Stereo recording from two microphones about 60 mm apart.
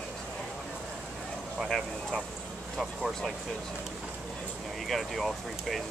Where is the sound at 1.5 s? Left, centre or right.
Centre.